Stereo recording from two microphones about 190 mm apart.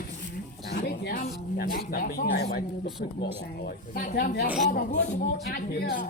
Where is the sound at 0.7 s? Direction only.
50° left (ahead or behind).